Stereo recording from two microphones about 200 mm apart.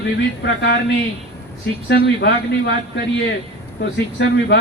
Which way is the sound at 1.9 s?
60° left (ahead or behind).